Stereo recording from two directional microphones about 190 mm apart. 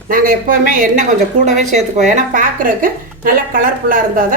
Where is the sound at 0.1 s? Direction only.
45° right (ahead or behind).